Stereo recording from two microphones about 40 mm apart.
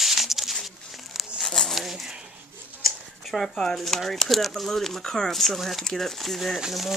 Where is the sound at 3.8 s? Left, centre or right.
Centre.